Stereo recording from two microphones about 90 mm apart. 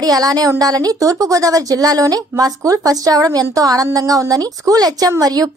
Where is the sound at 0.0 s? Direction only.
45° right (ahead or behind).